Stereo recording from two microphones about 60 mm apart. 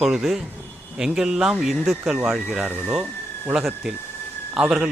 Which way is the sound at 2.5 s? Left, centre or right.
Right.